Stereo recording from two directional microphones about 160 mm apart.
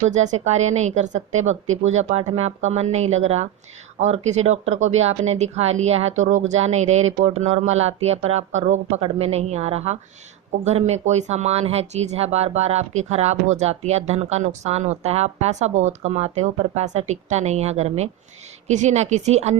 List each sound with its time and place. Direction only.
0.1 s speech: 45° right (ahead or behind)